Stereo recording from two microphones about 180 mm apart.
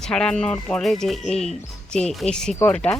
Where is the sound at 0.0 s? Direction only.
5° left (ahead or behind).